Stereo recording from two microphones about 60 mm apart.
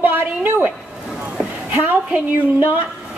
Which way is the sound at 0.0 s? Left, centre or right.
Right.